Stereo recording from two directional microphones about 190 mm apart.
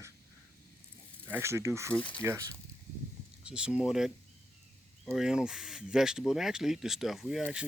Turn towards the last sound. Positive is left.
turn(degrees=-5)  # may be behind; listen again after turning